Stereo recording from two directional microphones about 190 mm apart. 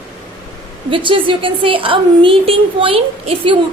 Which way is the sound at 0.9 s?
25° right (ahead or behind).